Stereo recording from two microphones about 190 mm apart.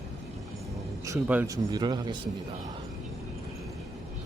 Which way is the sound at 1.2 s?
10° right (ahead or behind).